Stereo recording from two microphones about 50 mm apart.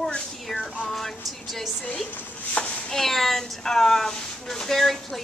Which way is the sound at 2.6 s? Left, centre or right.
Centre.